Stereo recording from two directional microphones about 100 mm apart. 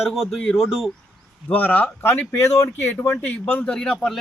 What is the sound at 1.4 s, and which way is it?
Speech, 15° left (ahead or behind).